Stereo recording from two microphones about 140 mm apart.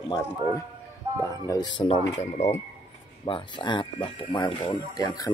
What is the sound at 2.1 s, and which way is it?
Speech, 50° left (ahead or behind).